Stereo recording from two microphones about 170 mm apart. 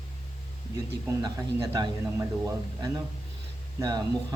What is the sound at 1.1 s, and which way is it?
Speech, 20° right (ahead or behind).